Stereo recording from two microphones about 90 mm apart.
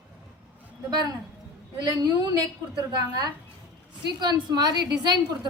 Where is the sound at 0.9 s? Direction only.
50° right (ahead or behind).